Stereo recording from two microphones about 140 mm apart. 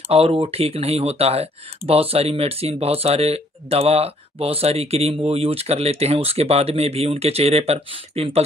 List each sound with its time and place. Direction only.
0.1 s speech: 45° right (ahead or behind)